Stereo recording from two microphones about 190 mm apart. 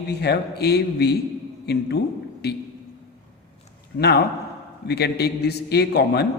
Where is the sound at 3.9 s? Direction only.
55° left (ahead or behind).